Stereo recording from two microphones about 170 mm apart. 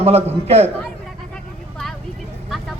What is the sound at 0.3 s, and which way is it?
Speech, 35° right (ahead or behind).